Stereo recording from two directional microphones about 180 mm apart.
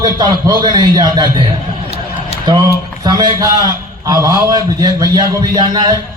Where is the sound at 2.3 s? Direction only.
25° right (ahead or behind).